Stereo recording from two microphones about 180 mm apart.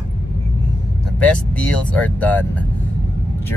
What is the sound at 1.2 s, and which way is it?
Speech, 5° left (ahead or behind).